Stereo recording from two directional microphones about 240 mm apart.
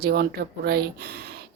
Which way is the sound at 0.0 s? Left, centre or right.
Right.